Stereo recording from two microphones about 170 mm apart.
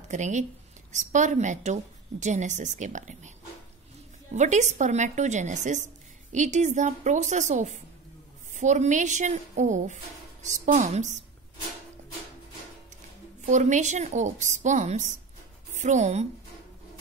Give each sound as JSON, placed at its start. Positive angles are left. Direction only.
{"t": 0.1, "sound": "a woman's voice", "side_deg": -45}
{"t": 13.4, "sound": "a woman's voice", "side_deg": -45}